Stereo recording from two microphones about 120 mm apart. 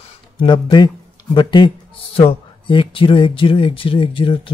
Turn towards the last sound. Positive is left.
turn(degrees=45)  # may be behind; listen again after turning